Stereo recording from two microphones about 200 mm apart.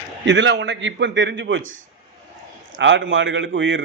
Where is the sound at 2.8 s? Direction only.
65° right (ahead or behind).